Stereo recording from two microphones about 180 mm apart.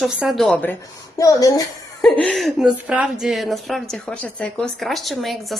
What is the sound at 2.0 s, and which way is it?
A woman's voice, 5° left (ahead or behind).